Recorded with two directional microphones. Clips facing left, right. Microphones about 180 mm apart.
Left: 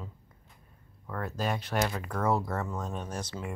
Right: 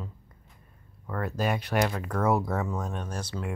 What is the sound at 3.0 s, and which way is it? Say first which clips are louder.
Speech: right 1 dB; 20° left (ahead or behind).